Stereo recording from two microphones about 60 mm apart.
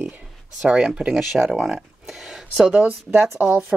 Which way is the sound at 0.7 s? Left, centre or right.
Centre.